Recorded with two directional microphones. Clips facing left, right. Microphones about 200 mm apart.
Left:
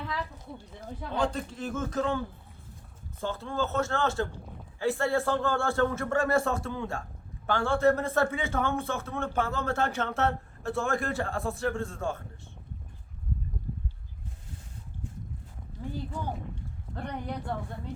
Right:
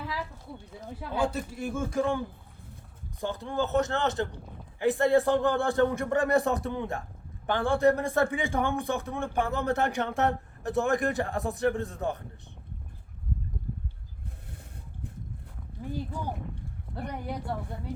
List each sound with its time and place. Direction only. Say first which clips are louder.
0.0 s a sound: even; 5° right (ahead or behind)
0.9 s a man's voice: right 1 dB; 10° right (ahead or behind)
16.9 s a man's voice: even; 10° right (ahead or behind)